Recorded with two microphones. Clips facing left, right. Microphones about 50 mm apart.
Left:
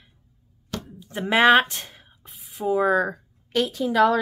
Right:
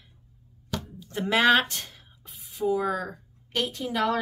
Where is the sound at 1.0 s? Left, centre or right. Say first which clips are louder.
Left 4 dB; left.